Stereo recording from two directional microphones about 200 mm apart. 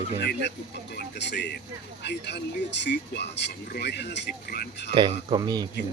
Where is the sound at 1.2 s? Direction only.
60° left (ahead or behind).